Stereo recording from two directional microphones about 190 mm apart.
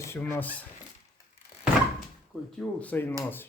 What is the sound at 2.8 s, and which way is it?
Speech, 10° left (ahead or behind).